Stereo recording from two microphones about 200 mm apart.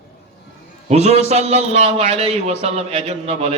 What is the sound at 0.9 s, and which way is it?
A man's voice, 30° right (ahead or behind).